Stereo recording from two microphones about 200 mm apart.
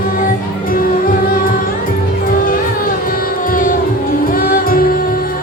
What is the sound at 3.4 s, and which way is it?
Music, 45° left (ahead or behind).